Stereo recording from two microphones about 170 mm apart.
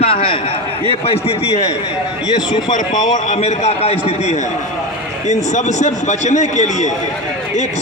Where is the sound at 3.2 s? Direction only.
40° left (ahead or behind).